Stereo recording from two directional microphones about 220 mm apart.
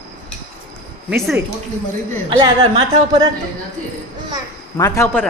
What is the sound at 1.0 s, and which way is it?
Speech, 5° right (ahead or behind).